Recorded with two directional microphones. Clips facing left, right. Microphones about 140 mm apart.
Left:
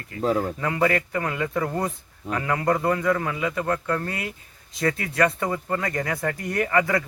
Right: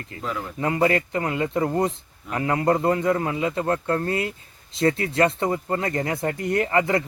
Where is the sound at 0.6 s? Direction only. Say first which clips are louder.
Right 2 dB; 25° right (ahead or behind).